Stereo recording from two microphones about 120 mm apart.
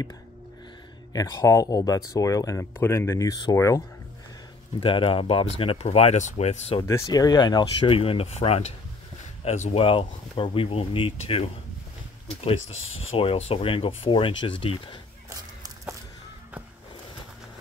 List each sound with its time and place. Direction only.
1.1 s speech: 35° left (ahead or behind)
4.7 s speech: 45° left (ahead or behind); by 6.8 s 65° left (ahead or behind)
6.8 s speech: 30° left (ahead or behind)
7.9 s speech: 50° left (ahead or behind); by 9.8 s 65° left (ahead or behind)
9.8 s speech: 45° left (ahead or behind)
15.2 s a sound: 25° right (ahead or behind)